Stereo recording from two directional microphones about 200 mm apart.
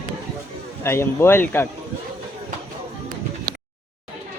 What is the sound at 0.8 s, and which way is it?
Speech, 10° left (ahead or behind).